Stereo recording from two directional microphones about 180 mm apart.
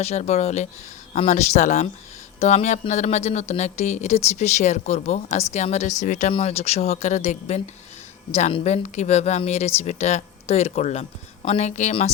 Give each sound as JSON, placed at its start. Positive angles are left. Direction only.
{"t": 0.0, "sound": "speech", "side_deg": 40}